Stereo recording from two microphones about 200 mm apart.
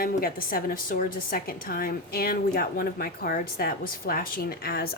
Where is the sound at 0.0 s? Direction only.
45° left (ahead or behind).